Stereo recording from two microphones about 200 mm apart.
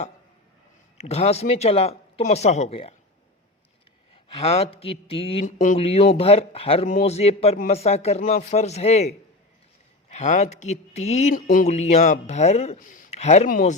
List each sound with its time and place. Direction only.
1.0 s speech: 30° left (ahead or behind)
4.1 s speech: 30° left (ahead or behind)